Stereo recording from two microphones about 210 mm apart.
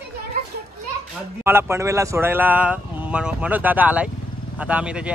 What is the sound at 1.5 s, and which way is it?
A man's voice, 10° right (ahead or behind).